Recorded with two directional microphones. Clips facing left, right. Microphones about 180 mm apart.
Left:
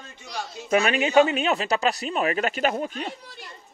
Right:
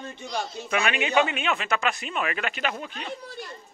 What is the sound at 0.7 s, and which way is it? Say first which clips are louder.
A man's voice: left 5 dB; 40° left (ahead or behind).